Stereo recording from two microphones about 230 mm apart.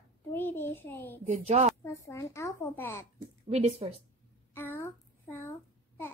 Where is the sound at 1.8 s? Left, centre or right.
Centre.